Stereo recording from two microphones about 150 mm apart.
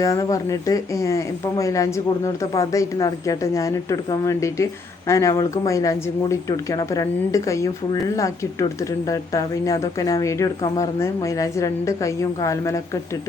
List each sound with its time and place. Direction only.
0.0 s speech: 20° left (ahead or behind)